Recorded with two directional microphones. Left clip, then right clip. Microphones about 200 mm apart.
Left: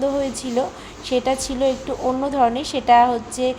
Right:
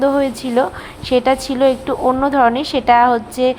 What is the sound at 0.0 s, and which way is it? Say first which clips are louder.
A woman's voice: right 6 dB; 15° right (ahead or behind).